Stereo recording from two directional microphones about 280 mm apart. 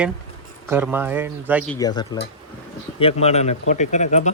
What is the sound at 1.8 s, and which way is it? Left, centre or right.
Speech, centre.